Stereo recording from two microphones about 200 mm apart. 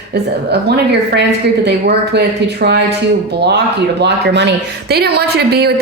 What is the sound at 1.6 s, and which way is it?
Speech, 55° right (ahead or behind).